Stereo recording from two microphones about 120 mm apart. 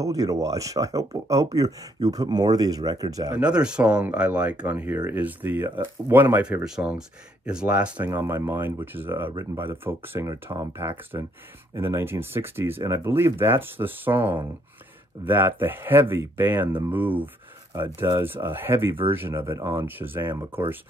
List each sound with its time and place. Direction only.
0.0 s speech: 30° right (ahead or behind)
3.3 s speech: 10° right (ahead or behind)
8.1 s speech: 20° right (ahead or behind)